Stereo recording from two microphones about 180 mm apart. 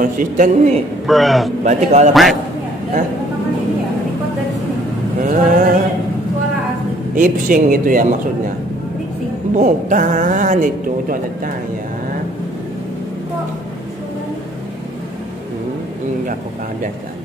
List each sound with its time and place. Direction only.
0.0 s a man's voice: 50° right (ahead or behind)
1.0 s a man's voice: centre (ahead or behind)
1.6 s a man's voice: 40° right (ahead or behind)
5.2 s a sound: 50° right (ahead or behind)
7.2 s a man's voice: 45° right (ahead or behind)
9.6 s a man's voice: 45° right (ahead or behind)